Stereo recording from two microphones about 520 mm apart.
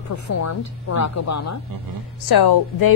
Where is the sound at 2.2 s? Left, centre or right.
Left.